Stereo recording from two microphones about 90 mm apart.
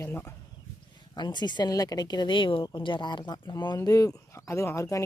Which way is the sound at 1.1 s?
55° left (ahead or behind).